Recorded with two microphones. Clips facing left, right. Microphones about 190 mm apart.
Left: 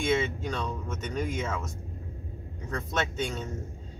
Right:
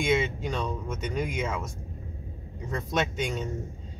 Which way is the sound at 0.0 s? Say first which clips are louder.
Right 1 dB; 15° right (ahead or behind).